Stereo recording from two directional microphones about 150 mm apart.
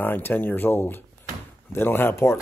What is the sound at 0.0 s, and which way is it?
Speech, 15° left (ahead or behind).